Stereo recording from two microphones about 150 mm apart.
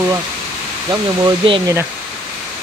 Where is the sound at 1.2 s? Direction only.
35° right (ahead or behind).